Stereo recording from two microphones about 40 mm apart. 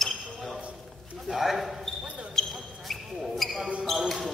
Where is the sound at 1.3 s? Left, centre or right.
Centre.